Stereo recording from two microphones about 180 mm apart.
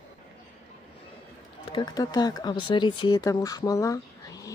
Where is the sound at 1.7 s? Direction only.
20° left (ahead or behind).